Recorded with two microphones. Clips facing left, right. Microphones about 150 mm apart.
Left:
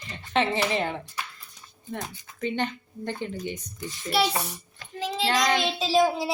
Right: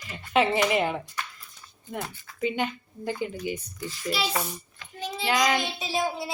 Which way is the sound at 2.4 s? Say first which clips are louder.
Right 1 dB; 10° right (ahead or behind).